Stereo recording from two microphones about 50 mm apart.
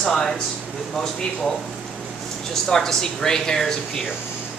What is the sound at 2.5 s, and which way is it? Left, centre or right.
Speech, centre.